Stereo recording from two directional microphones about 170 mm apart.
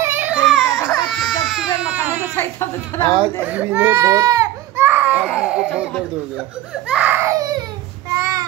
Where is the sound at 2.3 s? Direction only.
15° left (ahead or behind).